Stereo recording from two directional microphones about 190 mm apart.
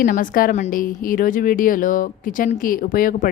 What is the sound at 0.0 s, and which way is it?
Speech, 45° left (ahead or behind).